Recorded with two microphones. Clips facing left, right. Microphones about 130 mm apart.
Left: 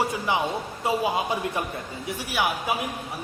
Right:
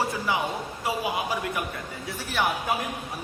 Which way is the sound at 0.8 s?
25° left (ahead or behind).